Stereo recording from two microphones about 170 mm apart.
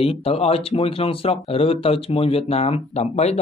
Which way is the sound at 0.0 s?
35° left (ahead or behind).